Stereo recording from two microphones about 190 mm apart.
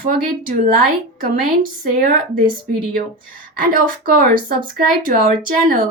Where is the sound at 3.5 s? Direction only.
45° right (ahead or behind).